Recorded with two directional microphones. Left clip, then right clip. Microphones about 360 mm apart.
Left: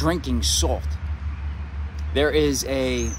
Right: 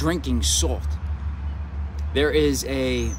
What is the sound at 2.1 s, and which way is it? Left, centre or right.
Speech, centre.